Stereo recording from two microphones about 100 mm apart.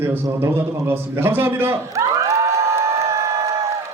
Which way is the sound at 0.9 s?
20° right (ahead or behind).